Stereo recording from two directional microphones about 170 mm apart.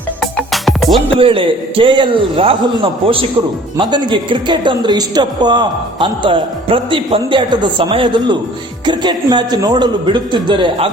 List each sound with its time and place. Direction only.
0.2 s music: centre (ahead or behind)
1.2 s a man's voice: 30° right (ahead or behind)